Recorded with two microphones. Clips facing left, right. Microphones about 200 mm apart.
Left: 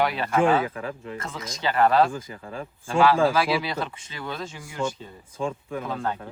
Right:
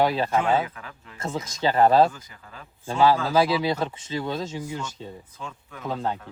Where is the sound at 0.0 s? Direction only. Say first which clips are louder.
Even; 30° right (ahead or behind).